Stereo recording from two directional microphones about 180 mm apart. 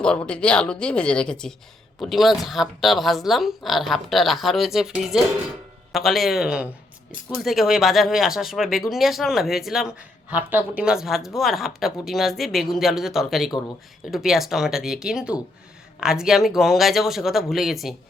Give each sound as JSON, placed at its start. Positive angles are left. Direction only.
{"t": 0.0, "sound": "speech", "side_deg": 5}